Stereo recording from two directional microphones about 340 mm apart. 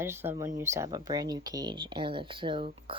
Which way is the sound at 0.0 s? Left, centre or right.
Centre.